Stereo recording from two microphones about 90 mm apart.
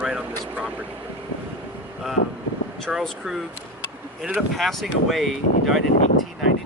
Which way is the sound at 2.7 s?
5° left (ahead or behind).